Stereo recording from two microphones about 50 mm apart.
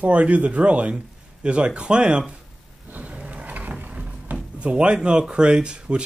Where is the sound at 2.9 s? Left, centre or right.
Right.